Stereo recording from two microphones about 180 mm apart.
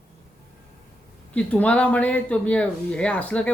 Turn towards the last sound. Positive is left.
turn(degrees=5)  # may be behind; listen again after turning